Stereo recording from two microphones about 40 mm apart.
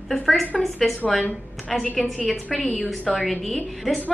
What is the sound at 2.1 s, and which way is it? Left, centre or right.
Speech, left.